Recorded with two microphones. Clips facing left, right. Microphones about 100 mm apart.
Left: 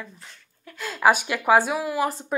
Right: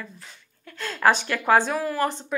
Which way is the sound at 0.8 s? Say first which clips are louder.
Left 1 dB; 10° left (ahead or behind).